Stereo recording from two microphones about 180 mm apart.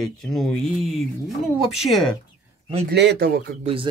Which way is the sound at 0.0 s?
Centre (ahead or behind).